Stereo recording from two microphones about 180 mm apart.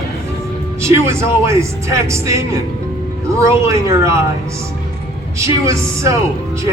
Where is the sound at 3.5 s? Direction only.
15° right (ahead or behind).